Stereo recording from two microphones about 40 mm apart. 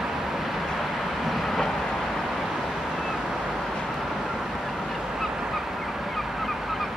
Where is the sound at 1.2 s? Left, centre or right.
Centre.